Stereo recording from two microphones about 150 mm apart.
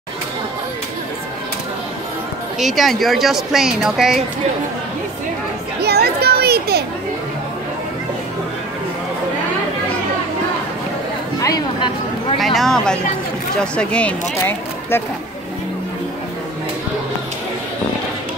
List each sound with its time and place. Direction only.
2.6 s speech: centre (ahead or behind)
5.8 s children playing: 90° right
11.3 s chatter: 25° left (ahead or behind)
12.4 s speech: centre (ahead or behind)